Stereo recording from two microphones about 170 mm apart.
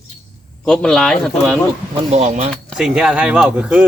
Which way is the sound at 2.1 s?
40° right (ahead or behind).